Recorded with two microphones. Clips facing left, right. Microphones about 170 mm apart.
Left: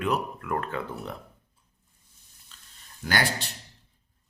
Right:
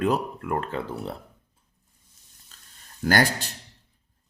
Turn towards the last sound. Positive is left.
turn(degrees=-45)  # may be behind; listen again after turning